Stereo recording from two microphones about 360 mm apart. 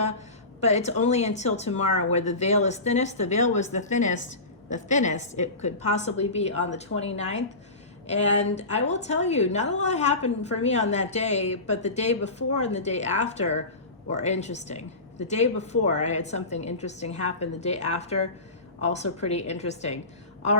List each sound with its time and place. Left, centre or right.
0.6 s a woman's voice: centre